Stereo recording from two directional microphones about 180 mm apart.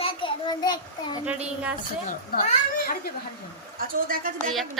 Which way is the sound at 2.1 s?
45° left (ahead or behind).